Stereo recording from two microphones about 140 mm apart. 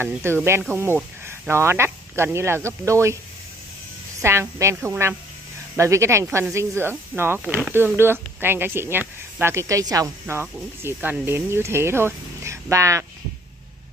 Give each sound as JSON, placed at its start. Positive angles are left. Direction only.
{"t": 0.0, "sound": "speech", "side_deg": -15}
{"t": 4.2, "sound": "speech", "side_deg": -20}